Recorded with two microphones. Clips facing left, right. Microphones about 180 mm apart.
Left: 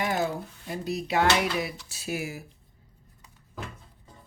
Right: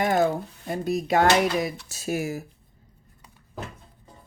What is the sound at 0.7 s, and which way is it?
Speech, 50° right (ahead or behind).